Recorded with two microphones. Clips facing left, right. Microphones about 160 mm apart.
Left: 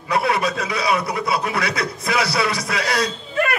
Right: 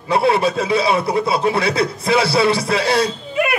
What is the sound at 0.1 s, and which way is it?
A man's voice, 30° right (ahead or behind).